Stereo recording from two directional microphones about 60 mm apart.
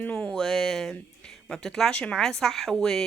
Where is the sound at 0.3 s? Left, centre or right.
Centre.